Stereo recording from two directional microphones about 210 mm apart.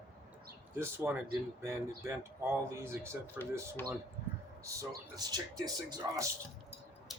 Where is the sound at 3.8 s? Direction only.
10° left (ahead or behind).